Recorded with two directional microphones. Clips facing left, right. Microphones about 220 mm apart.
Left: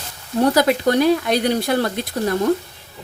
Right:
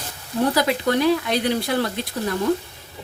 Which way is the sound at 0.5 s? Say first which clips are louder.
Left 4 dB; 45° left (ahead or behind).